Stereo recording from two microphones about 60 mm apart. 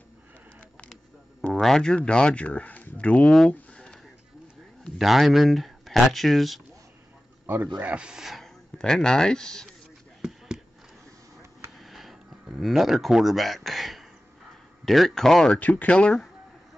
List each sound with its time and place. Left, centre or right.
1.5 s speech: centre; by 3.3 s left
3.7 s a sound: centre
4.9 s speech: centre
7.4 s a man's voice: right
7.9 s speech: centre
8.7 s speech: centre
11.8 s a sound: centre
14.9 s speech: centre
15.5 s speech: left